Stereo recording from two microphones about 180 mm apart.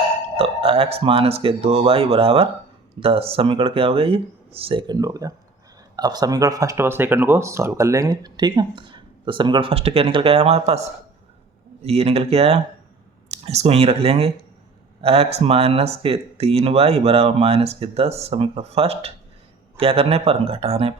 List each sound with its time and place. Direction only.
0.3 s speech: 30° right (ahead or behind)